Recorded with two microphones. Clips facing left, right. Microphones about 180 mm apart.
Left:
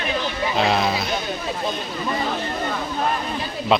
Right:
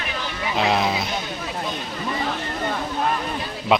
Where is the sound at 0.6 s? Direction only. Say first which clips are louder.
Even; 15° right (ahead or behind).